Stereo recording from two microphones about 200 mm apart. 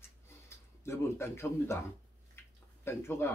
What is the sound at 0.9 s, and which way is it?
Speech, 15° left (ahead or behind).